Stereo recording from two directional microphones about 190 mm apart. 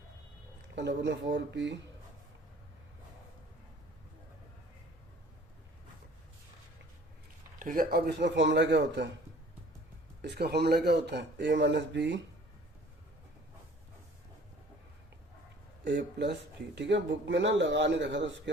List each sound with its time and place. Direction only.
0.8 s speech: 65° right (ahead or behind)
7.6 s speech: 45° right (ahead or behind); by 9.0 s 65° right (ahead or behind)
10.2 s speech: 60° right (ahead or behind)
15.8 s speech: 65° right (ahead or behind)